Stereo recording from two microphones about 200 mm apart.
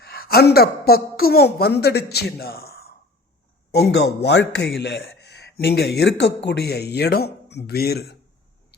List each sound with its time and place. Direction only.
0.0 s a woman's voice: 50° left (ahead or behind)